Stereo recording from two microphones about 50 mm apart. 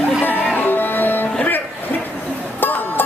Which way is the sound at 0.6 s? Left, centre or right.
Left.